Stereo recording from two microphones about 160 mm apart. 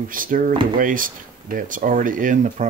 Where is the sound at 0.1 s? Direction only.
60° right (ahead or behind).